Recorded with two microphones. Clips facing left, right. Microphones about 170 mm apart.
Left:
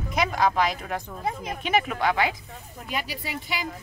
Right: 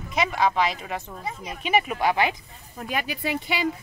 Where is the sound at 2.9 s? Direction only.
60° right (ahead or behind).